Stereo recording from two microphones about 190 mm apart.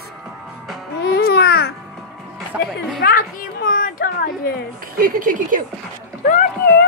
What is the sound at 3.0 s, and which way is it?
A child's voice, 50° left (ahead or behind).